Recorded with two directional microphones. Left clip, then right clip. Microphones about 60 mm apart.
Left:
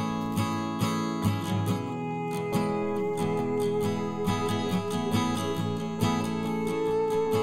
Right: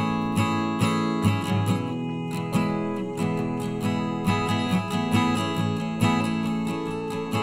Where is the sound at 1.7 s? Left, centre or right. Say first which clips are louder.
Right 2 dB; right.